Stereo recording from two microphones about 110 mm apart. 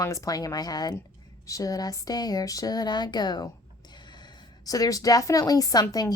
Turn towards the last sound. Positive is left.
turn(degrees=35)  # may be behind; listen again after turning